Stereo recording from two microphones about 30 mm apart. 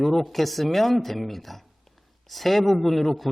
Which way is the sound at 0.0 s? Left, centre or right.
Centre.